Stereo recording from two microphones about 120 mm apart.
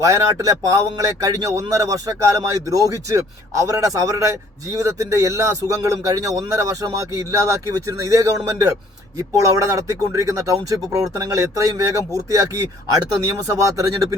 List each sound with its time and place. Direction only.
0.0 s a man's voice: 25° right (ahead or behind)
13.5 s a man's voice: 30° right (ahead or behind)